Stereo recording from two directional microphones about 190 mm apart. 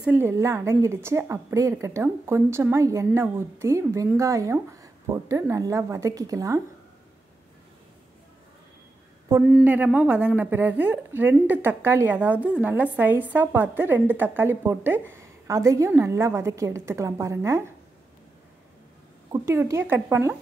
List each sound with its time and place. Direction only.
0.0 s a woman's voice: 10° right (ahead or behind)
9.5 s a woman's voice: 5° right (ahead or behind)
19.3 s a woman's voice: 15° right (ahead or behind)